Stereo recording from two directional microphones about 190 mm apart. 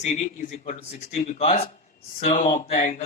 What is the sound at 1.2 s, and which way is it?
Speech, 35° left (ahead or behind).